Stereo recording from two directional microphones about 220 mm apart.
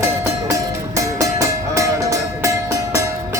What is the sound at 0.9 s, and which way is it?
Music, 15° right (ahead or behind).